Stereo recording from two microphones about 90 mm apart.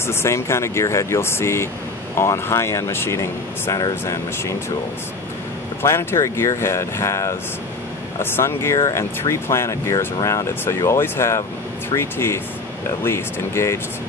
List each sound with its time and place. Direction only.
0.0 s speech: 30° left (ahead or behind)
5.8 s speech: 30° left (ahead or behind)